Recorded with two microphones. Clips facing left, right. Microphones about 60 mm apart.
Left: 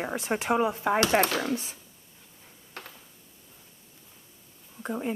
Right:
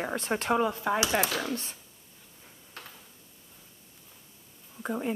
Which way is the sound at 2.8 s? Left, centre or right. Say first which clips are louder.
Left 3 dB; left.